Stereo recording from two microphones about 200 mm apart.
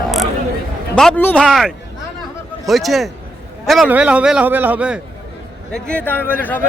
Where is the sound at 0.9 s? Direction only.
5° left (ahead or behind).